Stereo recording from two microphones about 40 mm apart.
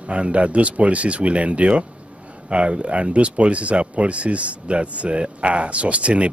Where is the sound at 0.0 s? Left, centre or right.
Right.